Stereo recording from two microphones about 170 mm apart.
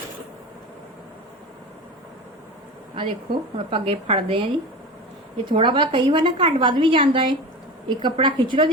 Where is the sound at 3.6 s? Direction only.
30° right (ahead or behind).